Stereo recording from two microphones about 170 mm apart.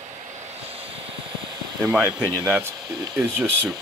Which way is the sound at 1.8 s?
5° right (ahead or behind).